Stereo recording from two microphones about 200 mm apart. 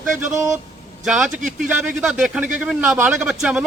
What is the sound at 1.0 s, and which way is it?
A man's voice, centre (ahead or behind).